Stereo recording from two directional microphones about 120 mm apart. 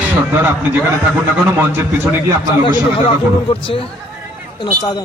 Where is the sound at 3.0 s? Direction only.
50° left (ahead or behind).